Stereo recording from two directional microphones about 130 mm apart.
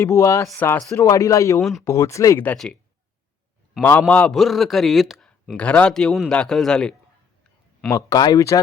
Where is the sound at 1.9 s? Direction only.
20° left (ahead or behind).